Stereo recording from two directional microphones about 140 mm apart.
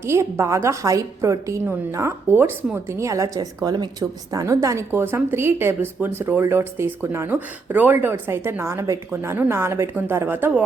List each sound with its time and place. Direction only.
0.0 s a woman's voice: 20° right (ahead or behind)